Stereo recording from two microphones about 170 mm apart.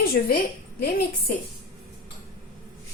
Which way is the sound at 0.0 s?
60° left (ahead or behind).